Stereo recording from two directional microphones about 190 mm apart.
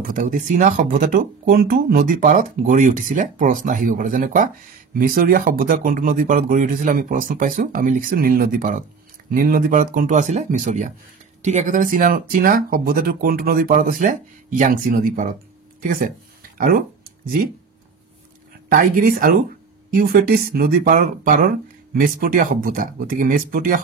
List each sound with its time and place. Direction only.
0.0 s speech: 45° right (ahead or behind)
16.5 s a sound: 50° right (ahead or behind)
18.7 s speech: 45° right (ahead or behind)